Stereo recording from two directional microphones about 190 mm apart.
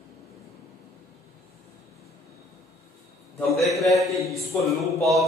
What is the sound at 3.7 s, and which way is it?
A man's voice, centre (ahead or behind).